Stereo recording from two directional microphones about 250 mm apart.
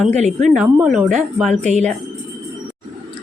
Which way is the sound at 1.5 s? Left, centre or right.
Right.